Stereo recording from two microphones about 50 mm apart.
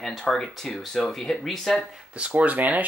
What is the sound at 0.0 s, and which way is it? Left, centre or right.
Speech, centre.